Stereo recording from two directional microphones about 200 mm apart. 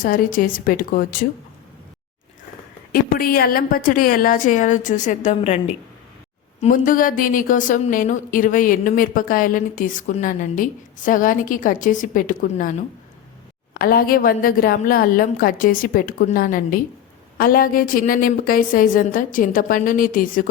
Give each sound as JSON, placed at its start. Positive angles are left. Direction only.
{"t": 0.0, "sound": "a woman's voice", "side_deg": 45}
{"t": 2.9, "sound": "a woman's voice", "side_deg": 45}
{"t": 6.6, "sound": "a woman's voice", "side_deg": 40}